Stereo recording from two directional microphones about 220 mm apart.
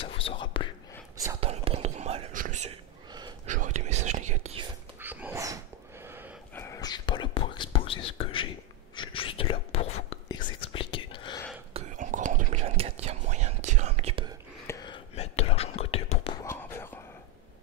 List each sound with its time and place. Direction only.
0.0 s whispering: 25° left (ahead or behind)
1.4 s whispering: 25° right (ahead or behind)
5.0 s dog: 10° right (ahead or behind)
6.5 s whispering: 10° left (ahead or behind)
11.7 s whispering: 35° right (ahead or behind)
14.7 s whispering: 20° left (ahead or behind)
16.4 s whispering: 10° left (ahead or behind)